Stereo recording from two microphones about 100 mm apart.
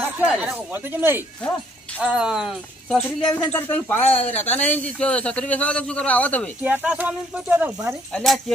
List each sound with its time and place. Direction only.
0.2 s speech: 10° right (ahead or behind)
0.7 s speech: 20° right (ahead or behind)
2.0 s speech: 10° right (ahead or behind)
3.4 s a man's voice: 20° left (ahead or behind)
6.6 s speech: 15° right (ahead or behind)
8.1 s speech: centre (ahead or behind)